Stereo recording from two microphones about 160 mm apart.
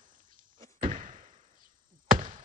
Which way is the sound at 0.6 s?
55° right (ahead or behind).